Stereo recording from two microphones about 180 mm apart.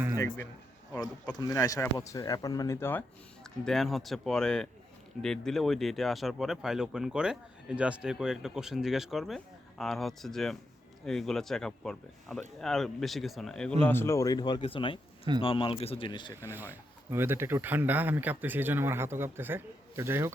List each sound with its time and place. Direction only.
0.9 s speech: 20° left (ahead or behind)
3.6 s speech: centre (ahead or behind); by 16.3 s 25° left (ahead or behind)
16.4 s speech: 10° right (ahead or behind)